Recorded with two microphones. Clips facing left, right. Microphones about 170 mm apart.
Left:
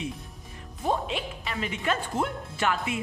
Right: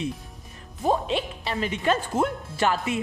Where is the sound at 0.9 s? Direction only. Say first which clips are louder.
Right 4 dB; 35° right (ahead or behind).